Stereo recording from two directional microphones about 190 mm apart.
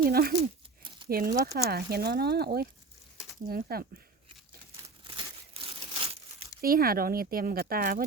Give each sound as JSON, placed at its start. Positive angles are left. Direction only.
{"t": 0.0, "sound": "speech", "side_deg": -50}
{"t": 0.8, "sound": "crumpling", "side_deg": -25}
{"t": 1.0, "sound": "speech", "side_deg": -50}
{"t": 5.0, "sound": "crumpling", "side_deg": -30}
{"t": 6.6, "sound": "speech", "side_deg": -50}